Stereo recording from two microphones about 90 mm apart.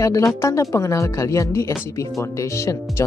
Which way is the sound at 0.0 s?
35° left (ahead or behind).